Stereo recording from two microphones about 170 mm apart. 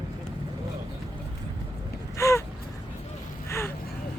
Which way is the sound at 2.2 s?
15° left (ahead or behind).